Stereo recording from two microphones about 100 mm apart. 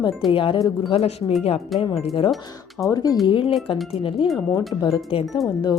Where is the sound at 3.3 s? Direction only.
60° left (ahead or behind).